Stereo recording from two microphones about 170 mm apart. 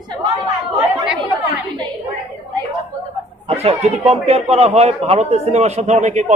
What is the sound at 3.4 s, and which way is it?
A man's voice, 35° right (ahead or behind).